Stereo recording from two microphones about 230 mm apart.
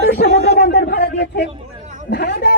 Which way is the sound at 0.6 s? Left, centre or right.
Left.